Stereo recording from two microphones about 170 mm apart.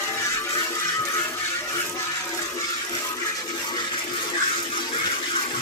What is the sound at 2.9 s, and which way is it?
Toilet flush, 20° left (ahead or behind).